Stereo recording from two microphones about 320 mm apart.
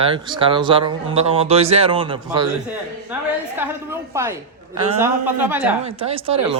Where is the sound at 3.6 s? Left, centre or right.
Centre.